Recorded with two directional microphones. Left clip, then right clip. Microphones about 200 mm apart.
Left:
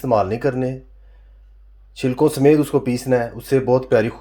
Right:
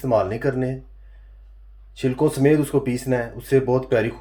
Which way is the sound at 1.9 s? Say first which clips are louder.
Left 3 dB; 35° left (ahead or behind).